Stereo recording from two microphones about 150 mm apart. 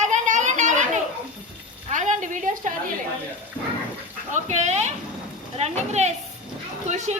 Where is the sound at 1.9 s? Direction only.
55° right (ahead or behind).